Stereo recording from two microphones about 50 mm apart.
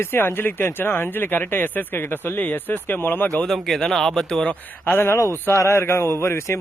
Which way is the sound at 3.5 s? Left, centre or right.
Centre.